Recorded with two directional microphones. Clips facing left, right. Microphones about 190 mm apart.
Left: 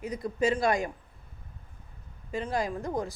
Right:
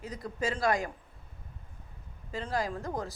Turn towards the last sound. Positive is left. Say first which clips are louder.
# left 3 dB
turn(degrees=15)  # may be behind; listen again after turning